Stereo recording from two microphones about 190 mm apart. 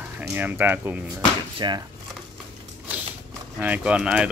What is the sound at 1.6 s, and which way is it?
Speech, 25° right (ahead or behind).